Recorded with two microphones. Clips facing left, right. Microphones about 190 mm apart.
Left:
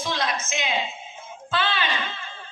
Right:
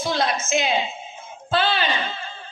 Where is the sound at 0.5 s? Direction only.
35° right (ahead or behind).